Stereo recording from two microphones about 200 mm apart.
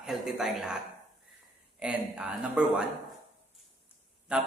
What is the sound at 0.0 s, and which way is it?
Speech, 5° right (ahead or behind).